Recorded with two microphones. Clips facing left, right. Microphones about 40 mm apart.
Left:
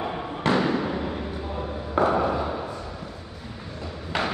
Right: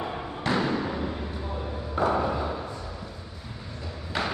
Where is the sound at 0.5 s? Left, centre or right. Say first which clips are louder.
Left 3 dB; centre.